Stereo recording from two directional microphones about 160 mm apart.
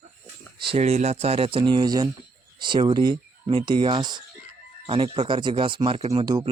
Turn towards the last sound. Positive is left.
turn(degrees=-25)  # may be behind; listen again after turning